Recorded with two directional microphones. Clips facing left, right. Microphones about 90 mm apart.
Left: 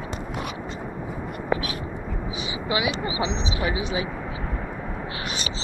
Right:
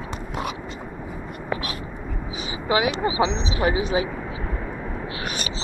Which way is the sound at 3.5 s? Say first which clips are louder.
Right 4 dB; 40° right (ahead or behind).